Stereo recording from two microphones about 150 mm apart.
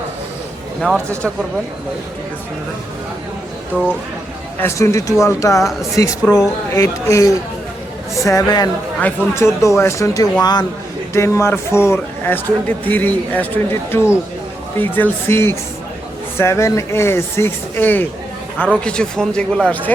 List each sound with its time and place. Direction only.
4.6 s speech: 20° left (ahead or behind)
9.0 s a man's voice: 15° left (ahead or behind)